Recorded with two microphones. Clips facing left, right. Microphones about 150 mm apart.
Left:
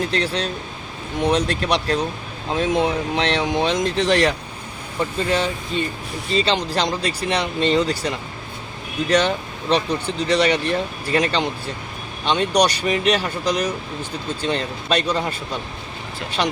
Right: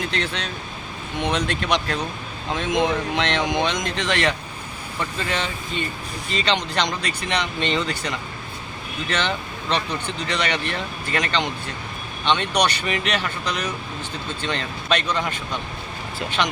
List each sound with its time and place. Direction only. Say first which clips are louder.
0.1 s speech: left 5 dB; 35° left (ahead or behind)